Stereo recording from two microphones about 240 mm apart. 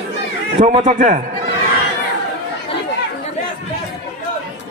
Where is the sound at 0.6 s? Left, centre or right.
Right.